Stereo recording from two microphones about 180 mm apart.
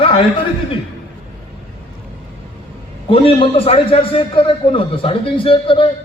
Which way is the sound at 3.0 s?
30° left (ahead or behind).